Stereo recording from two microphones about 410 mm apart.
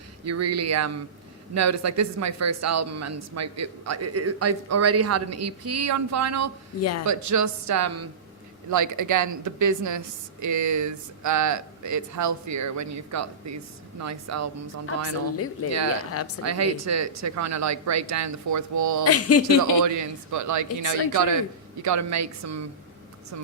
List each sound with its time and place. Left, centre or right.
0.3 s speech: right
15.6 s speech: left
16.4 s speech: right
19.0 s speech: left
19.8 s speech: right